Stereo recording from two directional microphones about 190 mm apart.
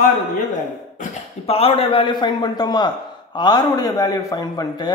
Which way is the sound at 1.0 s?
30° left (ahead or behind).